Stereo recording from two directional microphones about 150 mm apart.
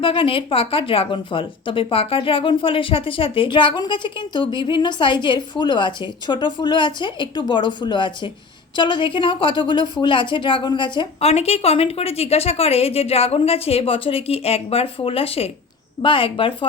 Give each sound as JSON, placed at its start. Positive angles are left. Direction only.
{"t": 0.0, "sound": "speech", "side_deg": 35}